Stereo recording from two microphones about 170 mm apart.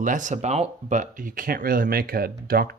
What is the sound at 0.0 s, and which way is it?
Speech, 50° right (ahead or behind).